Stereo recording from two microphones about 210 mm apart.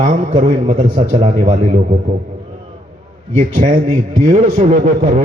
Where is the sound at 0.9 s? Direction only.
25° right (ahead or behind).